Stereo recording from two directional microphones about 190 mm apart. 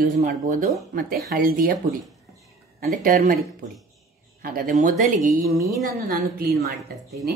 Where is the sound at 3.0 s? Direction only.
50° right (ahead or behind).